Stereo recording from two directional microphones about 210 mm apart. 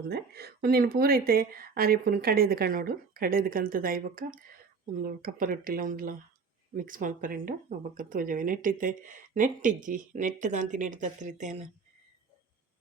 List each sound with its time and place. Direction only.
0.1 s a woman's voice: 50° right (ahead or behind)